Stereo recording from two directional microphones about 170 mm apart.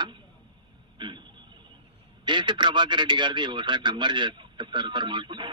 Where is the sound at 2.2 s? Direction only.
30° right (ahead or behind).